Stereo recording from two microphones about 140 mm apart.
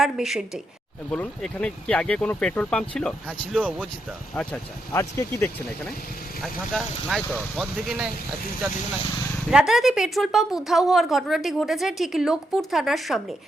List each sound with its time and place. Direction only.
0.0 s a woman's voice: 5° right (ahead or behind)
1.1 s speech: 5° left (ahead or behind)
3.6 s speech: 10° right (ahead or behind)
4.9 s speech: 20° left (ahead or behind)
6.4 s a woman's voice: centre (ahead or behind)
9.5 s a woman's voice: 5° right (ahead or behind)